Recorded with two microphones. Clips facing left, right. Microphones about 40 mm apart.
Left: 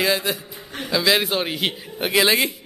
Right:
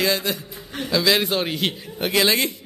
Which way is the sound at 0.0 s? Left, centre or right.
Centre.